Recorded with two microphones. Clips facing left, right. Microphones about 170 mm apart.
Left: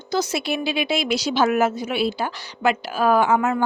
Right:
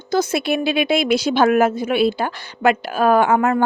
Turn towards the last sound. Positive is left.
turn(degrees=-55)  # may be behind; listen again after turning